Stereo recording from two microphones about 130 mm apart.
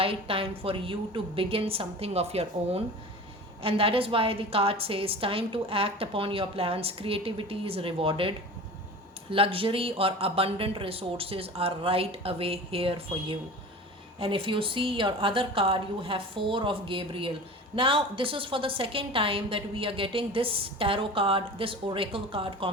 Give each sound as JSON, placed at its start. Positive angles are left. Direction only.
{"t": 0.0, "sound": "a woman's voice", "side_deg": -45}
{"t": 9.3, "sound": "a woman's voice", "side_deg": -45}